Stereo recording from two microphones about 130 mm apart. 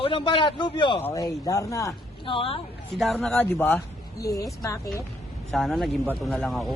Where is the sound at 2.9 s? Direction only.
Centre (ahead or behind).